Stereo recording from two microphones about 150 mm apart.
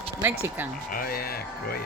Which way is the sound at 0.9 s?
80° left.